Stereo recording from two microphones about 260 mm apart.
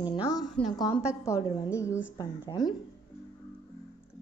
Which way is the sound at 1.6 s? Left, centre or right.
Centre.